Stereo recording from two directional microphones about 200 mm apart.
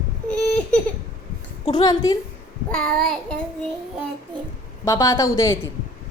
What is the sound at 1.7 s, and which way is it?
Speech, 20° left (ahead or behind).